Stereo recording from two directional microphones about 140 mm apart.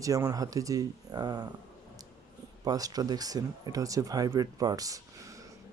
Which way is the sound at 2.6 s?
25° right (ahead or behind).